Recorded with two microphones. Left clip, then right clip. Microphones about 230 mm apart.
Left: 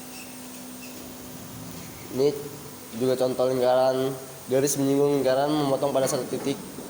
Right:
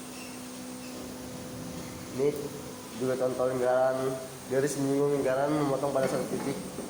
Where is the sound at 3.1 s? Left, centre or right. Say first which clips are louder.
Left 5 dB; left.